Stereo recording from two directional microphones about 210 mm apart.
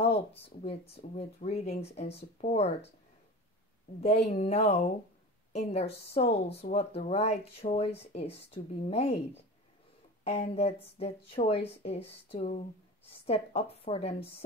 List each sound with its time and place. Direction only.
0.0 s speech: 30° left (ahead or behind)
4.0 s a woman's voice: 30° left (ahead or behind)
10.2 s speech: 30° left (ahead or behind)